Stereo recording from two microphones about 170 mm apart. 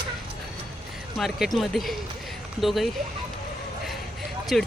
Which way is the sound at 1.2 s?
Centre (ahead or behind).